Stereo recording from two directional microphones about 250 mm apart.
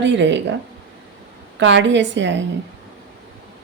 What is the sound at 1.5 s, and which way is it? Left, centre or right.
Speech, right.